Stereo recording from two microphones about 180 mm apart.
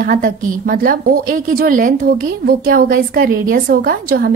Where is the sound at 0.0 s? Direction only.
50° right (ahead or behind).